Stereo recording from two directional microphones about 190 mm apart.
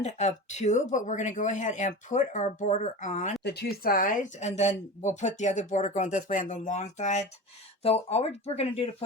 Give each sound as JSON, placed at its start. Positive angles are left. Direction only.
{"t": 0.0, "sound": "speech", "side_deg": 40}
{"t": 3.4, "sound": "speech", "side_deg": 60}